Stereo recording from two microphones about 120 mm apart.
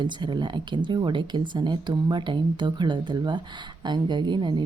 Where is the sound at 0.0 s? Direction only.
40° right (ahead or behind).